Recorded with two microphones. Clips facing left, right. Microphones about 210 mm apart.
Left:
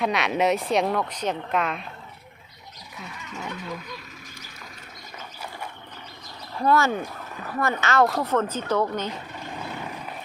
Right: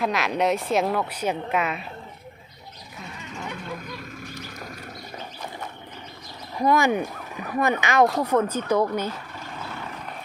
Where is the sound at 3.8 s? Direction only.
50° right (ahead or behind).